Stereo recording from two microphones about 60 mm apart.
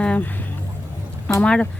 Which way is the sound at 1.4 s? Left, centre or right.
Centre.